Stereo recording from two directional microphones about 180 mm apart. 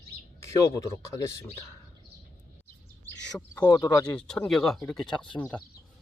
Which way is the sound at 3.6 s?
20° left (ahead or behind).